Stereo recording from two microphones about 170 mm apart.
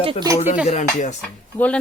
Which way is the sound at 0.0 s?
30° right (ahead or behind).